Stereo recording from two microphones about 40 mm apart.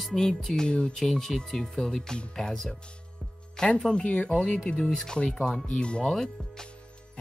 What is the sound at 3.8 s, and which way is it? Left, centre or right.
Music, centre.